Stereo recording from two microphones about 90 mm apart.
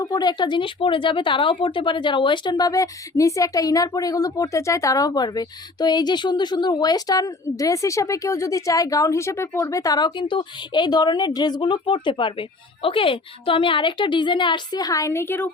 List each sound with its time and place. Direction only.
0.0 s speech: 50° left (ahead or behind); by 15.4 s 25° left (ahead or behind)